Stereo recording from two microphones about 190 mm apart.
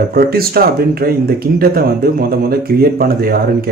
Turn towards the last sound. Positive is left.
turn(degrees=-50)  # may be behind; listen again after turning